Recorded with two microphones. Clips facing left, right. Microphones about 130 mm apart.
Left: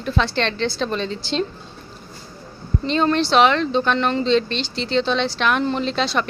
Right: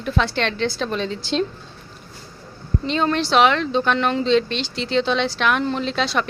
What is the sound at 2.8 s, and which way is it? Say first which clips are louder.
Speech: left 2 dB; 5° right (ahead or behind).